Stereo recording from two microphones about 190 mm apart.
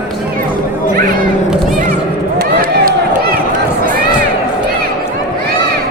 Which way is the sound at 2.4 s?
50° right (ahead or behind).